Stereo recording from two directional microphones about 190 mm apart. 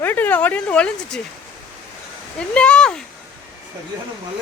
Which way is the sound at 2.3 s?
5° left (ahead or behind).